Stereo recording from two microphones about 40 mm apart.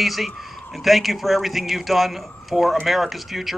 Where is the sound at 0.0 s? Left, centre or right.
Centre.